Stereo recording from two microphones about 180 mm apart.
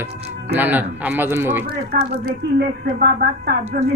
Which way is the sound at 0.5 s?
10° right (ahead or behind).